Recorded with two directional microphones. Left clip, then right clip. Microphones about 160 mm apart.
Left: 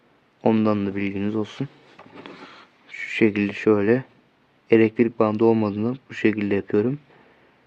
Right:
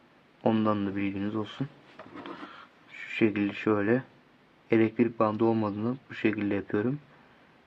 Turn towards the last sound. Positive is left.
turn(degrees=40)  # may be behind; listen again after turning